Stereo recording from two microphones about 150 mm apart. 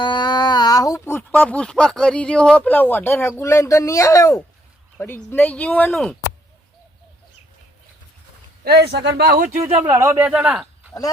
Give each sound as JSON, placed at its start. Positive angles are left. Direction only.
{"t": 0.0, "sound": "a sound", "side_deg": 30}
{"t": 1.3, "sound": "speech", "side_deg": 10}
{"t": 8.6, "sound": "speech", "side_deg": -90}
{"t": 9.8, "sound": "a man's voice", "side_deg": -20}